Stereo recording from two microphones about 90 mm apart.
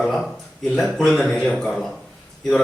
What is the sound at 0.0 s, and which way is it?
Speech, centre (ahead or behind).